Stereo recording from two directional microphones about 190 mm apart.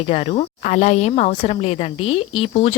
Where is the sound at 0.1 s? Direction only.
30° left (ahead or behind).